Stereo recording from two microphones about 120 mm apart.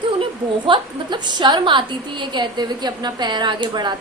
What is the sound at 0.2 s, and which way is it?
A woman's voice, 40° right (ahead or behind).